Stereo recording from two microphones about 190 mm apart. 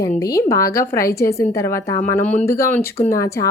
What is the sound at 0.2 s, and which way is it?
A woman's voice, 15° left (ahead or behind).